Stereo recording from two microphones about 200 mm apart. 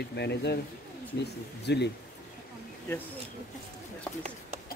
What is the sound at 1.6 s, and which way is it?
Speech, 60° left (ahead or behind).